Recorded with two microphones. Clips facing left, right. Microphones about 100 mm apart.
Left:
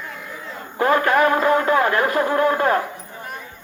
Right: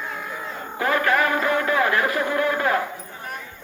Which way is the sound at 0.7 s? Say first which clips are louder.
Left 4 dB; 35° left (ahead or behind).